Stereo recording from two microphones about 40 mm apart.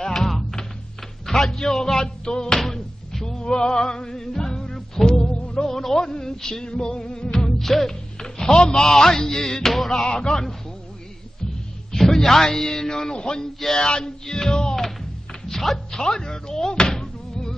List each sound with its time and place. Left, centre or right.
0.0 s music: centre
1.2 s speech: centre
2.6 s music: centre
5.3 s music: left
5.6 s music: centre
6.6 s music: left
7.6 s music: centre
7.9 s music: centre
10.0 s music: left
11.9 s speech: centre
13.1 s music: left
15.4 s music: centre
16.0 s slam: centre